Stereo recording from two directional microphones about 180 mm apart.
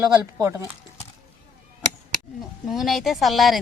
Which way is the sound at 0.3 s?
15° right (ahead or behind).